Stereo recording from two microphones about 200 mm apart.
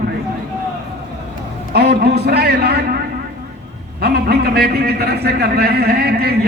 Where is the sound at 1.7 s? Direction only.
50° right (ahead or behind).